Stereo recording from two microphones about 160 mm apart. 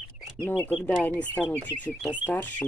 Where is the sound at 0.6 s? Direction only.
10° left (ahead or behind).